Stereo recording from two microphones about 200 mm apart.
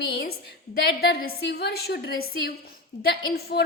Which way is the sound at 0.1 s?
50° left (ahead or behind).